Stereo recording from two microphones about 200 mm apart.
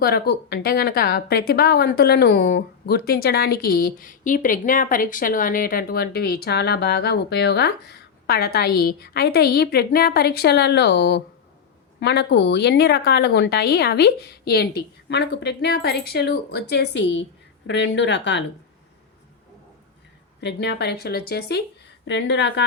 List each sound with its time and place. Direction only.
0.0 s a woman's voice: 50° left (ahead or behind)
20.4 s a woman's voice: 60° left (ahead or behind)
22.0 s a woman's voice: 60° left (ahead or behind)